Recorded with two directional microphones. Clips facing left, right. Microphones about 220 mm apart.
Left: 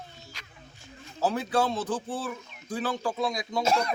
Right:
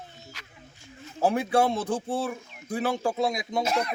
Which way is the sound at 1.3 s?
25° right (ahead or behind).